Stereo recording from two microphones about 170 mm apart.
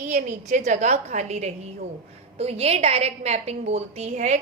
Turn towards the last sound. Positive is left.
turn(degrees=-40)  # may be behind; listen again after turning